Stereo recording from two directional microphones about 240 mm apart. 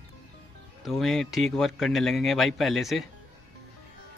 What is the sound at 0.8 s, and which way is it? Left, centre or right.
Speech, centre.